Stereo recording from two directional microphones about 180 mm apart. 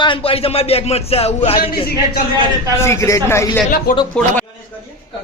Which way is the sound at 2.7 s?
15° left (ahead or behind).